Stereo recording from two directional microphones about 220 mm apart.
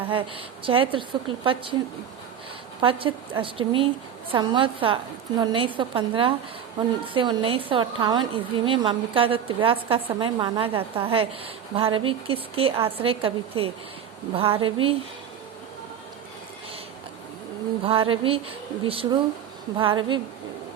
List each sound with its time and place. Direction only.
0.1 s a woman's voice: 25° right (ahead or behind)
2.8 s a woman's voice: 25° right (ahead or behind)
17.8 s a woman's voice: 25° right (ahead or behind)